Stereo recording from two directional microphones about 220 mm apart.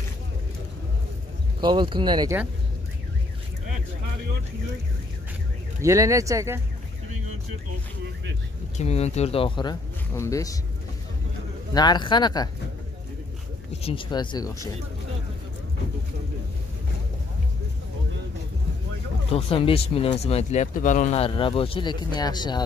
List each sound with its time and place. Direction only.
1.6 s speech: 20° right (ahead or behind)
5.8 s speech: 15° right (ahead or behind)
8.7 s speech: 30° left (ahead or behind)
11.7 s speech: 20° left (ahead or behind)
13.8 s speech: 20° left (ahead or behind)
19.3 s speech: 25° left (ahead or behind)